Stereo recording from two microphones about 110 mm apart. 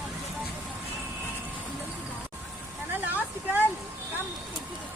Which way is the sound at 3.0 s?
15° right (ahead or behind).